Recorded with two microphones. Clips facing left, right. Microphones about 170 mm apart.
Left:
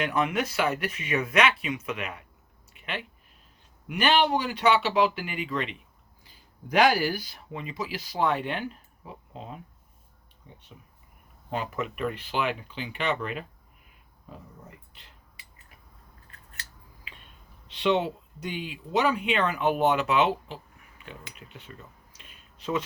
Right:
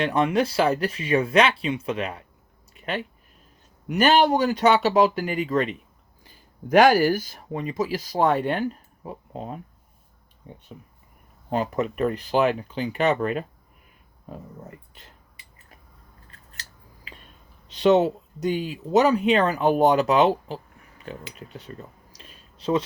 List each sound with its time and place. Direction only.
0.0 s speech: 30° right (ahead or behind)
2.7 s a sound: 40° right (ahead or behind)
3.8 s speech: 40° right (ahead or behind)
11.4 s speech: 40° right (ahead or behind)
16.5 s scissors: 40° right (ahead or behind)
17.7 s speech: 40° right (ahead or behind)
21.0 s a sound: 40° right (ahead or behind)